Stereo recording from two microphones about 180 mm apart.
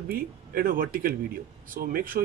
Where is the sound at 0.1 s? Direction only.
50° right (ahead or behind).